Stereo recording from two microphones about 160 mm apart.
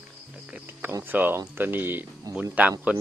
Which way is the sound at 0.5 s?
10° right (ahead or behind).